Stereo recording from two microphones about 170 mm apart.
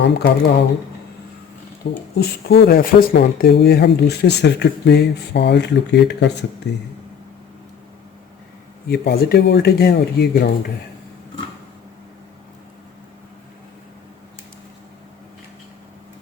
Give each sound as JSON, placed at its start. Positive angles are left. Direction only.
{"t": 0.0, "sound": "speech", "side_deg": 80}
{"t": 2.1, "sound": "speech", "side_deg": 65}
{"t": 8.9, "sound": "speech", "side_deg": 70}